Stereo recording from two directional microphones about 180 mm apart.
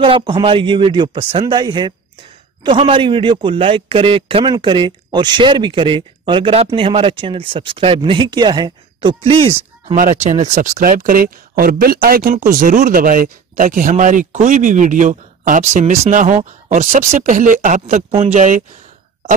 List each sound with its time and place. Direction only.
0.0 s a man's voice: 25° right (ahead or behind); by 18.6 s 40° right (ahead or behind)